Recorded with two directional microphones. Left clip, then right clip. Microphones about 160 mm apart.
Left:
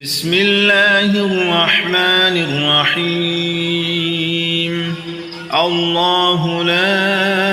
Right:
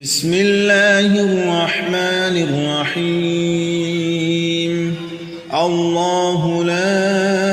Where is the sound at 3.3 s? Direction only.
50° right (ahead or behind).